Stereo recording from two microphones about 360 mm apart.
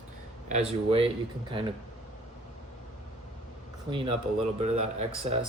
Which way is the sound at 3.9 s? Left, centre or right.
Centre.